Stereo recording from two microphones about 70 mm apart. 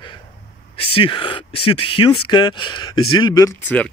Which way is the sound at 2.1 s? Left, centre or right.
Left.